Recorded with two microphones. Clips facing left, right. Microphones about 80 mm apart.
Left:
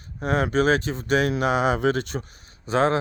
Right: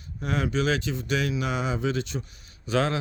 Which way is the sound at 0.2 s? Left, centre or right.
Left.